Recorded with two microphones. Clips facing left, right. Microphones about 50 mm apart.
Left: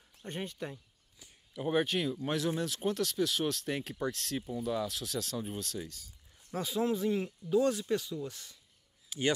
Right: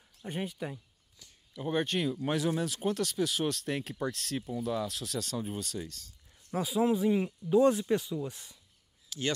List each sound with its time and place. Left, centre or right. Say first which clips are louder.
0.2 s speech: right 3 dB; centre
1.2 s speech: left 1 dB; centre
6.5 s speech: right 4 dB; centre
9.1 s speech: left 2 dB; centre